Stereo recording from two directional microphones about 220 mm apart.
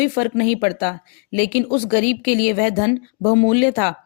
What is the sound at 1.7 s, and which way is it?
Speech, 25° left (ahead or behind).